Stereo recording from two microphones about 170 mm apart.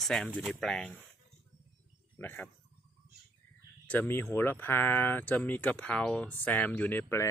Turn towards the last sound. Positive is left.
turn(degrees=15)  # may be behind; listen again after turning